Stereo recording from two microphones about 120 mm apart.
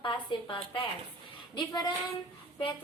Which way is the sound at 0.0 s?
40° left (ahead or behind).